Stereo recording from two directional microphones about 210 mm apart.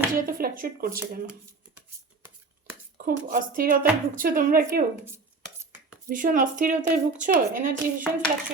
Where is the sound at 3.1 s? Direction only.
40° right (ahead or behind).